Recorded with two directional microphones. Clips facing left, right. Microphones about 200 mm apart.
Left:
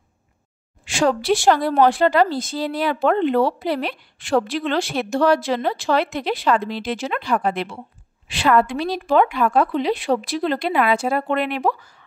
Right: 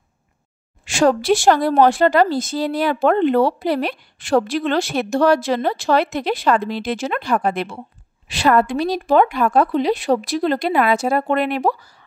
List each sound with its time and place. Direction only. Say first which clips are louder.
0.8 s a woman's voice: right 3 dB; 45° right (ahead or behind)